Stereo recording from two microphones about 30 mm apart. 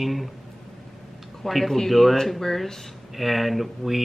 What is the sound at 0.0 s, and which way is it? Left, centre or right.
Speech, centre.